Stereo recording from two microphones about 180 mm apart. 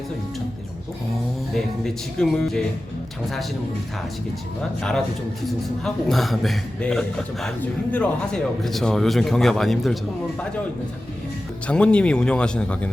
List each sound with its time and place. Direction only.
1.5 s a man's voice: centre (ahead or behind)
4.8 s a man's voice: 5° left (ahead or behind)
11.7 s a man's voice: 5° left (ahead or behind)